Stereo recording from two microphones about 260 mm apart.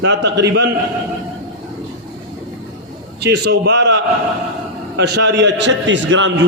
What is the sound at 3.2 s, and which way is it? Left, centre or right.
A man's voice, right.